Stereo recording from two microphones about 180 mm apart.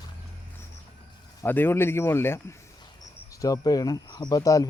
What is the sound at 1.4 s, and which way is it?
Speech, 10° left (ahead or behind).